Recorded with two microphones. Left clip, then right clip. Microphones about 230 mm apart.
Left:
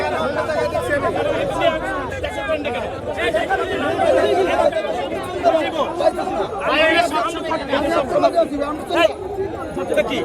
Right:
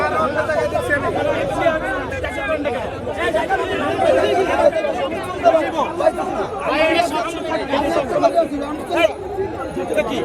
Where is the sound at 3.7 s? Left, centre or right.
Left.